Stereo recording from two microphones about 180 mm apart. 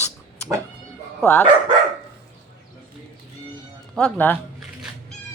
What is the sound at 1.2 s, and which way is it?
Speech, 10° left (ahead or behind).